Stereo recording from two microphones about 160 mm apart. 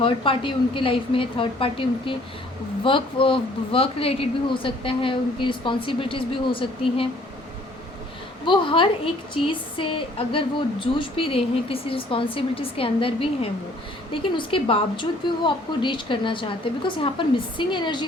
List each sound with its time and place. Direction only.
0.0 s speech: 35° left (ahead or behind)
8.4 s speech: 30° left (ahead or behind)